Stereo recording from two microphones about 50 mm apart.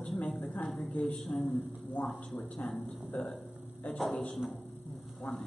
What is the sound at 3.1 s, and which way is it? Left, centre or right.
Speech, left.